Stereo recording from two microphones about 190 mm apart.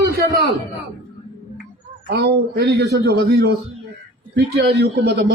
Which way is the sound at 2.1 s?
60° right (ahead or behind).